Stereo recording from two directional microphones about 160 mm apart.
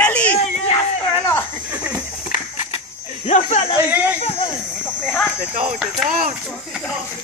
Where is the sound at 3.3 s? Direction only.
45° left (ahead or behind).